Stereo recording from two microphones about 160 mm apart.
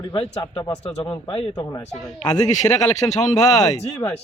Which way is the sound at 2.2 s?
50° left (ahead or behind).